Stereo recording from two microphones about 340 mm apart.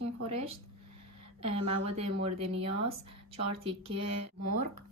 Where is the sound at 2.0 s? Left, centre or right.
Centre.